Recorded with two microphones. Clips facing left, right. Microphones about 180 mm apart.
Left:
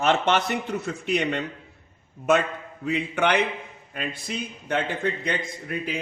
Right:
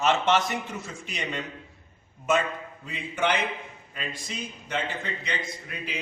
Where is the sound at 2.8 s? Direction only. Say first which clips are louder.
Left 5 dB; 65° left (ahead or behind).